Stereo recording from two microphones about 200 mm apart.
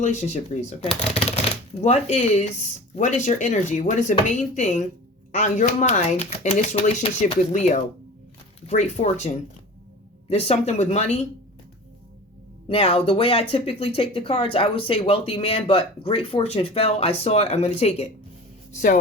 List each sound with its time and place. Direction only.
0.0 s speech: 35° left (ahead or behind)
12.6 s speech: 30° left (ahead or behind)